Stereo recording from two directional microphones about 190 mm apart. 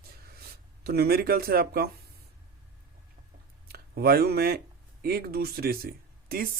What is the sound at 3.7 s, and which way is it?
Speech, 55° right (ahead or behind).